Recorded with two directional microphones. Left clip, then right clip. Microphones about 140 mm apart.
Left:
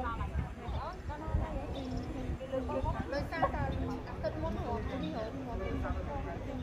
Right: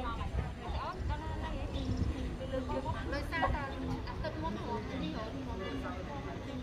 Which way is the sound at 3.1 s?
40° right (ahead or behind).